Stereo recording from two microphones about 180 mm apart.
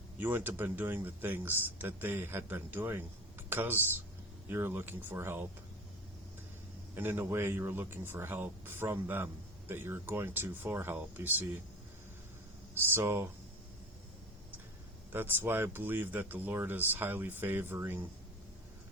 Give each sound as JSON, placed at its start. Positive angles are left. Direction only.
{"t": 0.2, "sound": "speech", "side_deg": -10}
{"t": 6.9, "sound": "speech", "side_deg": -10}
{"t": 12.7, "sound": "speech", "side_deg": -10}
{"t": 15.1, "sound": "speech", "side_deg": -10}